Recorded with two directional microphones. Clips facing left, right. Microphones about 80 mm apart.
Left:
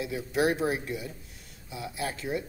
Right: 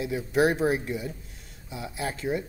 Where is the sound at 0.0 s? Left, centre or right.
Right.